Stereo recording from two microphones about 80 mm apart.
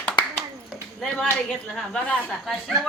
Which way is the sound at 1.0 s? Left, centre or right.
Centre.